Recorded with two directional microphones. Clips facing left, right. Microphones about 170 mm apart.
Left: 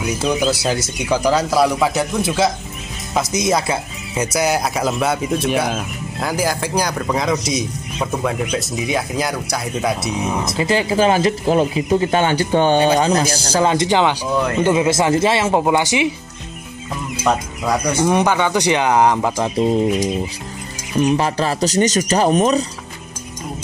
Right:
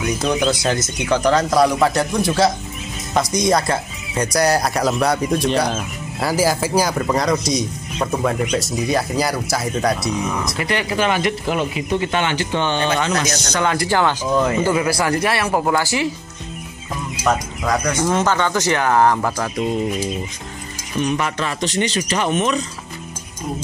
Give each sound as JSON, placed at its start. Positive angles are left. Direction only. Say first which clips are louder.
{"t": 0.0, "sound": "speech", "louder": "even", "side_deg": 5}
{"t": 10.2, "sound": "speech", "louder": "left 3 dB", "side_deg": 25}
{"t": 14.4, "sound": "speech", "louder": "left 1 dB", "side_deg": -5}
{"t": 14.7, "sound": "speech", "louder": "left 3 dB", "side_deg": 20}
{"t": 17.2, "sound": "speech", "louder": "left 1 dB", "side_deg": 10}
{"t": 21.0, "sound": "speech", "louder": "left 4 dB", "side_deg": 35}